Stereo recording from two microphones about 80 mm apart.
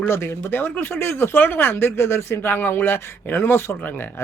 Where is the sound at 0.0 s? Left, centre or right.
Left.